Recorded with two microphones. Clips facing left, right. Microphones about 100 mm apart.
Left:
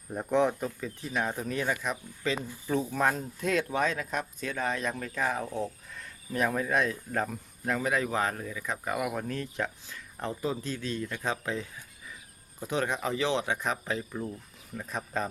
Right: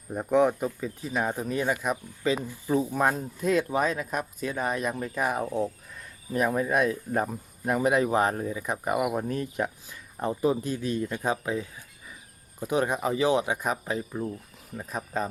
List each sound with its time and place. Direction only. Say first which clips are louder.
0.1 s speech: right 4 dB; 10° right (ahead or behind)